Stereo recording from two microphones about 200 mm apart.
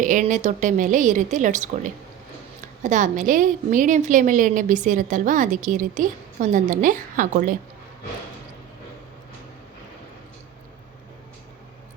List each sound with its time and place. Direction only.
0.0 s a woman's voice: 40° right (ahead or behind)
2.8 s a woman's voice: 40° right (ahead or behind)